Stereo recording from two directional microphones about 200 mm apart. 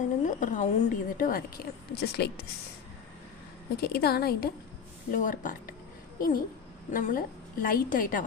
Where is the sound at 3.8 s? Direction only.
50° left (ahead or behind).